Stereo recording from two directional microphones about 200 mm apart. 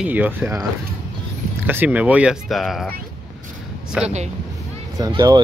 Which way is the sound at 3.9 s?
5° right (ahead or behind).